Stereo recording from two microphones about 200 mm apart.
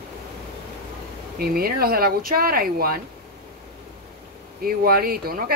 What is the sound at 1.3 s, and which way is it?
Speech, 50° right (ahead or behind).